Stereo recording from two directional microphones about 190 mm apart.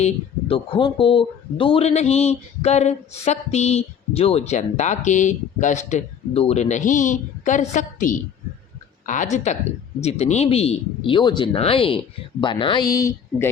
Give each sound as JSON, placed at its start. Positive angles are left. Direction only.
{"t": 0.0, "sound": "speech", "side_deg": 30}